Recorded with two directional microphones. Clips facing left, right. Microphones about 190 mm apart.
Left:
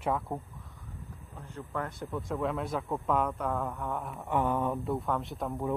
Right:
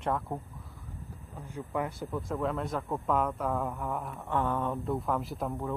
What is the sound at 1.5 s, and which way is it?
Speech, 10° right (ahead or behind).